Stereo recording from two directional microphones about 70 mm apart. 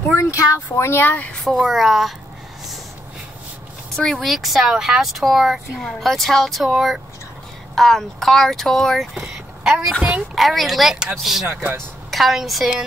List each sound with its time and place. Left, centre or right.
0.1 s speech: left
1.1 s speech: left
1.4 s speech: centre
3.9 s speech: centre
9.2 s a sound: centre
10.3 s speech: centre
11.4 s speech: right
12.1 s a woman's voice: centre